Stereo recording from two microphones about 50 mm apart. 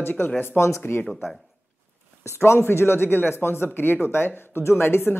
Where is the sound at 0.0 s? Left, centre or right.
Left.